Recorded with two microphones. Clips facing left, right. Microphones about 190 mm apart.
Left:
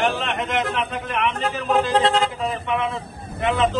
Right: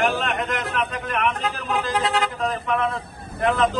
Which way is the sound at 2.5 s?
Centre (ahead or behind).